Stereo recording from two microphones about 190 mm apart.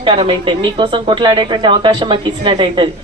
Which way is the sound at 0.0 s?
25° right (ahead or behind).